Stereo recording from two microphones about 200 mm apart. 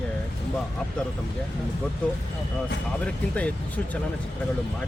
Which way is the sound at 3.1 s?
5° left (ahead or behind).